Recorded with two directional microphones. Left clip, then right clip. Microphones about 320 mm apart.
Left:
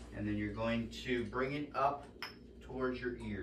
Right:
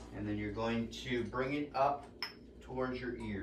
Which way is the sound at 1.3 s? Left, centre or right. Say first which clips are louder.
Right 5 dB; centre.